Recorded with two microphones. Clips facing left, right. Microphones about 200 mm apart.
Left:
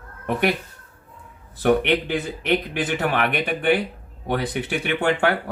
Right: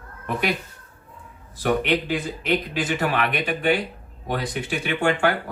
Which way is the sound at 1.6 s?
60° left (ahead or behind).